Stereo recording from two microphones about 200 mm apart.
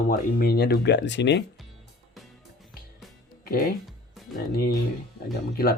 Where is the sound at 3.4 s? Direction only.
50° left (ahead or behind).